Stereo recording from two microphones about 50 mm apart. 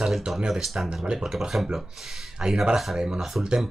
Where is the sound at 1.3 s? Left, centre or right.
Centre.